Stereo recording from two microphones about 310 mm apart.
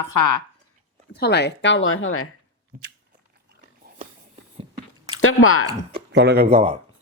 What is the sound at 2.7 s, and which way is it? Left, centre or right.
Speech, right.